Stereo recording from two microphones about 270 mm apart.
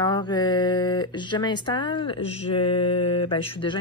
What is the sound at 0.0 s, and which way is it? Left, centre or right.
Speech, centre.